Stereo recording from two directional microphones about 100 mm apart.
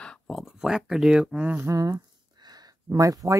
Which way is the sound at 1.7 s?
35° right (ahead or behind).